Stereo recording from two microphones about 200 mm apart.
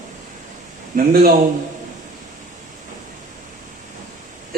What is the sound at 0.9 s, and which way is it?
Speech, 50° right (ahead or behind).